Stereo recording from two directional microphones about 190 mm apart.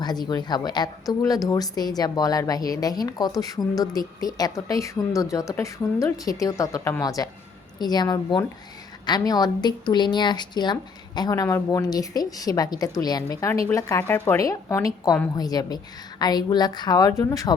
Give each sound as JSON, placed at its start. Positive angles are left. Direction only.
{"t": 0.0, "sound": "a woman's voice", "side_deg": 20}